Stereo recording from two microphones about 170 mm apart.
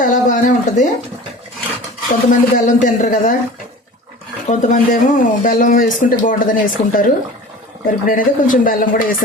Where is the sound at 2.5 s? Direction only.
50° left (ahead or behind).